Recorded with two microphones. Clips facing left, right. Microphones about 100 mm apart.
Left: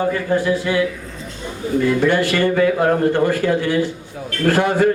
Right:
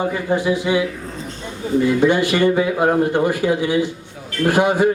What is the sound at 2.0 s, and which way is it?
A man's voice, 15° right (ahead or behind).